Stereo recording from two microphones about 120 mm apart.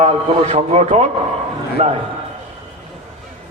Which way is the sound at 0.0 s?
60° right (ahead or behind).